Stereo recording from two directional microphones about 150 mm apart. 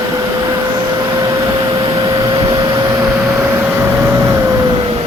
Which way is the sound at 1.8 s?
25° right (ahead or behind).